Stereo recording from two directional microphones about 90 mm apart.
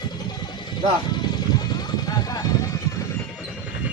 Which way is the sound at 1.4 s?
50° left (ahead or behind).